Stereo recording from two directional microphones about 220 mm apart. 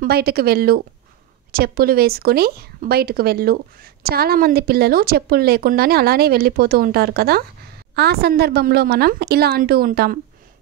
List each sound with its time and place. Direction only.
0.0 s speech: 45° right (ahead or behind)